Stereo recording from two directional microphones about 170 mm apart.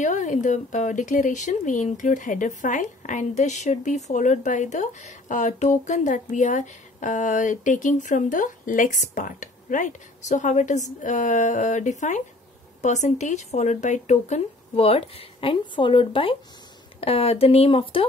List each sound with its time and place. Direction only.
0.0 s speech: 45° left (ahead or behind)